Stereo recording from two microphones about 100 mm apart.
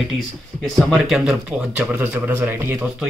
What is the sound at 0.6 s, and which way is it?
Speech, 5° left (ahead or behind).